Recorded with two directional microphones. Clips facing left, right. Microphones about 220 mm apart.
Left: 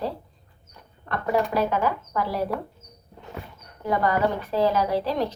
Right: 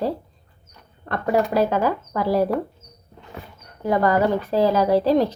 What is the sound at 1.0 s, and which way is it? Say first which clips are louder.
Speech: right 3 dB; 35° right (ahead or behind).